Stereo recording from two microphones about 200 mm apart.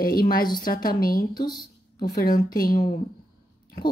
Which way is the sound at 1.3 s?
20° left (ahead or behind).